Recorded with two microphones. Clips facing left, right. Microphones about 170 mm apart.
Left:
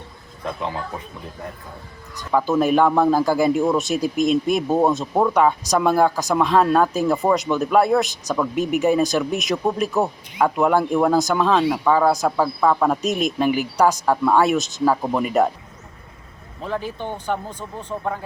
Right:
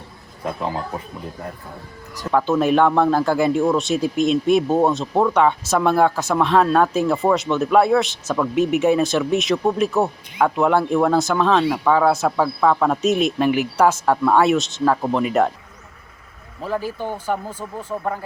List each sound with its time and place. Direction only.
2.3 s speech: centre (ahead or behind)
16.6 s speech: 5° right (ahead or behind)